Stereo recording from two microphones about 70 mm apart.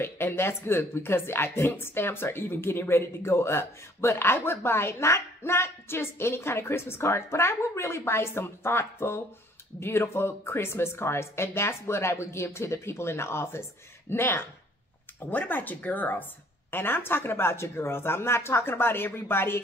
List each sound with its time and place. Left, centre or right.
0.0 s speech: left